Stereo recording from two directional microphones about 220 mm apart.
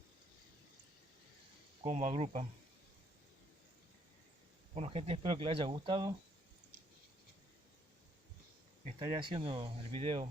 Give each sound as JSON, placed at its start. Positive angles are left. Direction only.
{"t": 1.8, "sound": "speech", "side_deg": -30}
{"t": 4.7, "sound": "speech", "side_deg": -25}
{"t": 9.0, "sound": "speech", "side_deg": -20}